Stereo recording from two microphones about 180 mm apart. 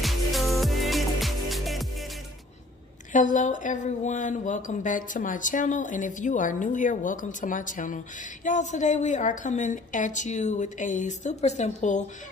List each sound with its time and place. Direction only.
0.0 s music: centre (ahead or behind)
3.1 s speech: 45° left (ahead or behind)